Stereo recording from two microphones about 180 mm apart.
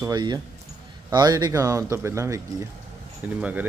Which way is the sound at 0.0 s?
25° right (ahead or behind).